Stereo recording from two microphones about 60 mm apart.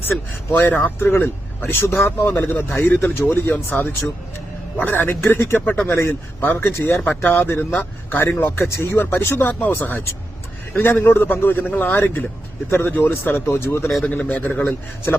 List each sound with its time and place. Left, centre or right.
0.5 s speech: left
5.9 s a man's voice: left
6.4 s speech: left
14.1 s a man's voice: left